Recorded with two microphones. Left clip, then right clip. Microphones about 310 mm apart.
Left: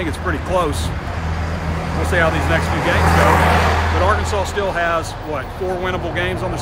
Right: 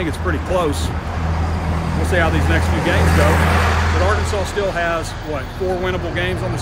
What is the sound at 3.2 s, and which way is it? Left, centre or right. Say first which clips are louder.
Speech: left 3 dB; left.